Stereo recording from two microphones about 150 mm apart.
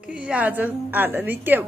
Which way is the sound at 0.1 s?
10° right (ahead or behind).